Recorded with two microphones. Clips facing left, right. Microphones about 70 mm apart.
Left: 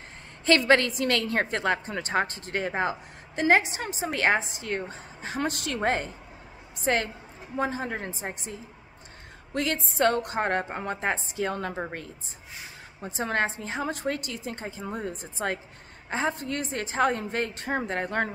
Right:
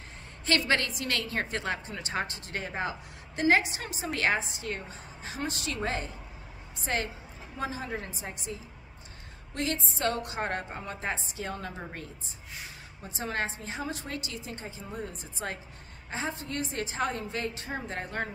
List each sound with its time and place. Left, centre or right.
0.5 s a woman's voice: left
4.6 s a woman's voice: left
9.5 s a woman's voice: left
13.0 s a woman's voice: left